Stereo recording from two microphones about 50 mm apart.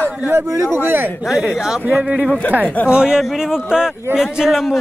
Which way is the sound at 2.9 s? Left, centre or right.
Centre.